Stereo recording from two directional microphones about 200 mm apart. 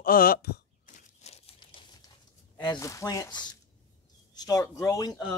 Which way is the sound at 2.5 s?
15° left (ahead or behind).